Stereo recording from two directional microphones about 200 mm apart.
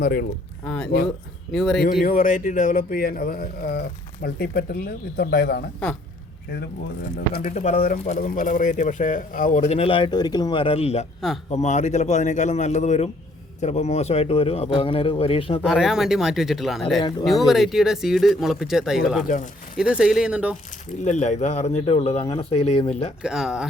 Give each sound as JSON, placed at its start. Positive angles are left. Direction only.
{"t": 0.0, "sound": "a man's voice", "side_deg": 50}
{"t": 1.5, "sound": "speech", "side_deg": 0}
{"t": 1.8, "sound": "a man's voice", "side_deg": 50}
{"t": 7.5, "sound": "a man's voice", "side_deg": 35}
{"t": 15.6, "sound": "speech", "side_deg": 0}
{"t": 21.0, "sound": "speech", "side_deg": 35}
{"t": 23.2, "sound": "speech", "side_deg": 0}